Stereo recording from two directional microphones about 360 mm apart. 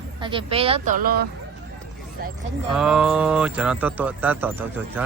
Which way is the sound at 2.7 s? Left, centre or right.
Centre.